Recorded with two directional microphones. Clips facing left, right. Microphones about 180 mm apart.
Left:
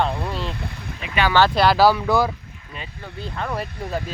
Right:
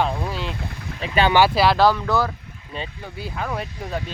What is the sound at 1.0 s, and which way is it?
Speech, 35° right (ahead or behind).